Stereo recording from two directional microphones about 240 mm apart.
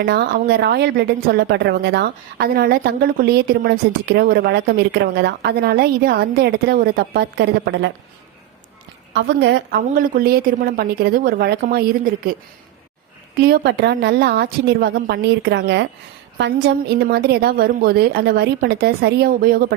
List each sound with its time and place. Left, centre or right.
0.0 s a woman's voice: right
9.1 s a woman's voice: right
13.4 s a woman's voice: right